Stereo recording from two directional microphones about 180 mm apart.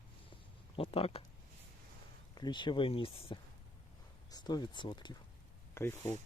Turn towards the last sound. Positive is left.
turn(degrees=15)  # may be behind; listen again after turning